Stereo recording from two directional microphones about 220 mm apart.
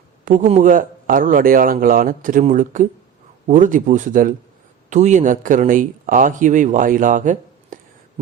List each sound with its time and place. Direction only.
0.3 s speech: 35° right (ahead or behind)